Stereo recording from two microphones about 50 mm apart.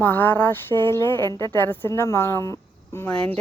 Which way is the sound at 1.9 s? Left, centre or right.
Left.